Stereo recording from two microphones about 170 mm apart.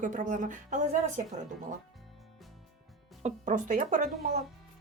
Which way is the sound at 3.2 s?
45° right (ahead or behind).